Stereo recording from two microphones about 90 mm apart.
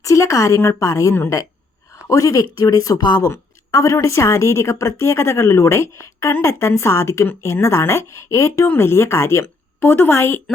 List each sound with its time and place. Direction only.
0.0 s a woman's voice: 35° left (ahead or behind)
3.2 s a woman's voice: 35° left (ahead or behind)